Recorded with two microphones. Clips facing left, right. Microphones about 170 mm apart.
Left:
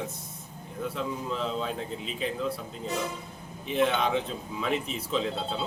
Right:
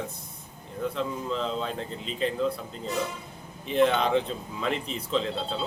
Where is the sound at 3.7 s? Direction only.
5° left (ahead or behind).